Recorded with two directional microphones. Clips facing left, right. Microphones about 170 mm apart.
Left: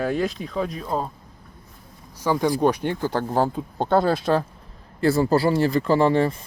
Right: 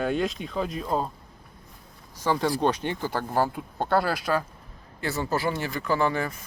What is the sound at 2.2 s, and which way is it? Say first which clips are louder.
Speech: left 4 dB; 10° left (ahead or behind).